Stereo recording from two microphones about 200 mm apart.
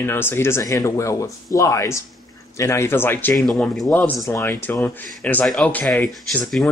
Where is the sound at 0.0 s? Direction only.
10° left (ahead or behind).